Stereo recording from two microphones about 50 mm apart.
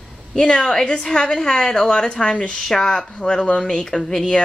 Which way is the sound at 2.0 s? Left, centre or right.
Centre.